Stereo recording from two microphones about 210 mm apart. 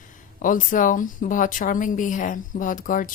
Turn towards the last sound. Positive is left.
turn(degrees=40)  # may be behind; listen again after turning